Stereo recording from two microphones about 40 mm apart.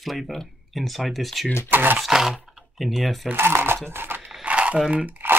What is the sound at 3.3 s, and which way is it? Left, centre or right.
Speech, right.